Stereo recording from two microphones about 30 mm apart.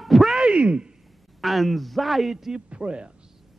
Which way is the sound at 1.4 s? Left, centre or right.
Centre.